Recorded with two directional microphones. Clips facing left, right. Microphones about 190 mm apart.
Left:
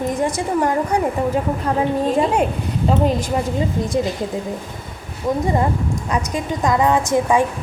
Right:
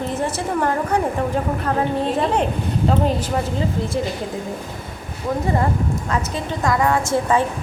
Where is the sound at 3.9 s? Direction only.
20° left (ahead or behind).